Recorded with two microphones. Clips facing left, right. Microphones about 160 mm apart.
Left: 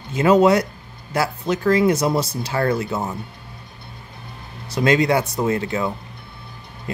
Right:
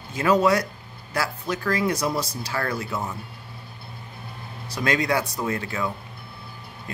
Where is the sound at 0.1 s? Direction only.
20° left (ahead or behind).